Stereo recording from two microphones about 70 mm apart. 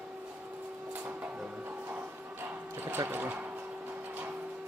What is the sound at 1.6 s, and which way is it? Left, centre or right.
Music, right.